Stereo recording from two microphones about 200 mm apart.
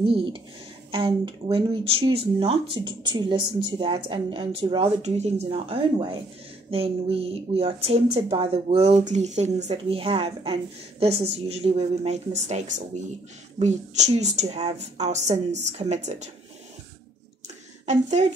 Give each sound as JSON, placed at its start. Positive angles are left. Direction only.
{"t": 0.0, "sound": "a woman's voice", "side_deg": -25}